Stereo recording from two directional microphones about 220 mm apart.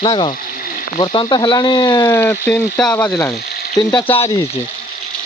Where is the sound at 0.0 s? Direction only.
20° left (ahead or behind).